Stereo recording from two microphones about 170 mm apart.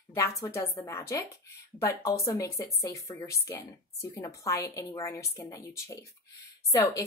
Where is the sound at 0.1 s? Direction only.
20° left (ahead or behind).